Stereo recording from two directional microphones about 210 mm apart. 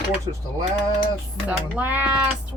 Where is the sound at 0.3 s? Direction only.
25° right (ahead or behind).